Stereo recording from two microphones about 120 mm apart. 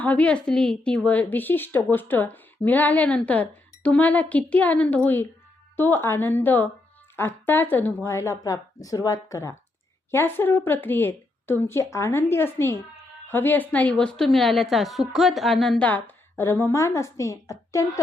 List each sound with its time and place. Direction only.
0.0 s a woman's voice: 10° left (ahead or behind)
15.8 s a woman's voice: 15° left (ahead or behind)